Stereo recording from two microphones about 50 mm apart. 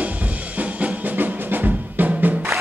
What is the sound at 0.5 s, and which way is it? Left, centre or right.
Music, right.